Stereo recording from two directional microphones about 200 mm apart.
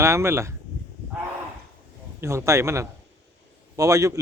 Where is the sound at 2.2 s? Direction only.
15° right (ahead or behind).